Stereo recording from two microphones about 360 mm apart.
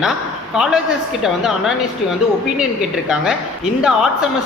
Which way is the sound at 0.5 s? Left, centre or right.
Centre.